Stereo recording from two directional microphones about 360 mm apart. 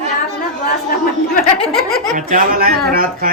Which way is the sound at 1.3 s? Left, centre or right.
Left.